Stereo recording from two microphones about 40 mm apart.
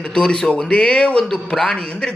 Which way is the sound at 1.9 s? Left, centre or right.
Left.